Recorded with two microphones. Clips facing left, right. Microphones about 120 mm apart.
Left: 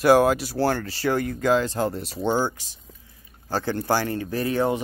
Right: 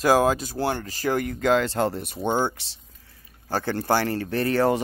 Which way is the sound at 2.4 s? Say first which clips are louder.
Even; 70° right (ahead or behind).